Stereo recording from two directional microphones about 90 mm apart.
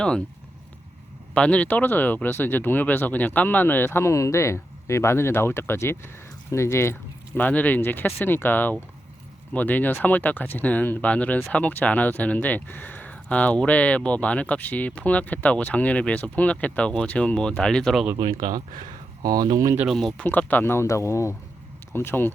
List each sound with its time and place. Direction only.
1.3 s speech: 15° left (ahead or behind); by 6.9 s 30° left (ahead or behind)
7.3 s speech: 20° left (ahead or behind)
18.2 s speech: 45° right (ahead or behind)
19.9 s speech: centre (ahead or behind)
20.2 s speech: 20° left (ahead or behind)